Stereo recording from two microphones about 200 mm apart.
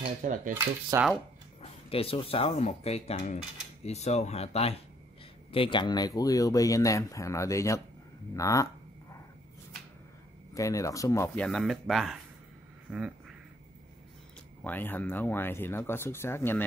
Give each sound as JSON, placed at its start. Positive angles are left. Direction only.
{"t": 0.2, "sound": "speech", "side_deg": -40}
{"t": 0.9, "sound": "speech", "side_deg": -15}
{"t": 1.6, "sound": "speech", "side_deg": 30}
{"t": 10.5, "sound": "speech", "side_deg": 15}
{"t": 12.9, "sound": "a sound", "side_deg": -5}
{"t": 14.6, "sound": "speech", "side_deg": 10}